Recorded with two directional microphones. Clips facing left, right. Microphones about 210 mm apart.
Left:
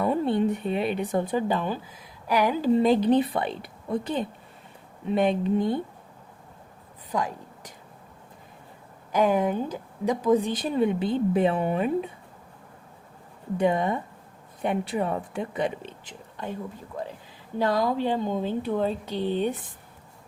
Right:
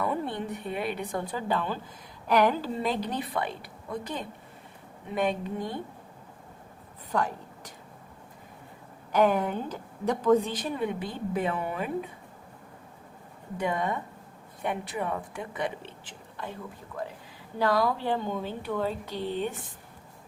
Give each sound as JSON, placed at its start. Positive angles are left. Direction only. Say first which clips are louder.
{"t": 0.0, "sound": "speech", "louder": "left 7 dB", "side_deg": 30}
{"t": 2.7, "sound": "speech", "louder": "left 10 dB", "side_deg": 20}
{"t": 7.1, "sound": "a sound", "louder": "even", "side_deg": 10}
{"t": 9.1, "sound": "speech", "louder": "left 2 dB", "side_deg": 10}
{"t": 10.6, "sound": "speech", "louder": "left 6 dB", "side_deg": 25}
{"t": 13.6, "sound": "speech", "louder": "left 5 dB", "side_deg": 25}
{"t": 17.6, "sound": "speech", "louder": "left 2 dB", "side_deg": 20}